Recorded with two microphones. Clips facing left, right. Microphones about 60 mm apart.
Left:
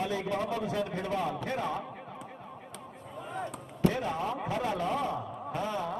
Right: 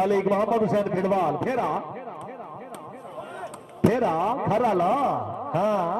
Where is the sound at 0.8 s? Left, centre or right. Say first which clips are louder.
Right 10 dB; right.